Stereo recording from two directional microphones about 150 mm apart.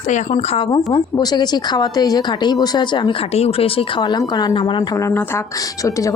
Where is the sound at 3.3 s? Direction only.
40° left (ahead or behind).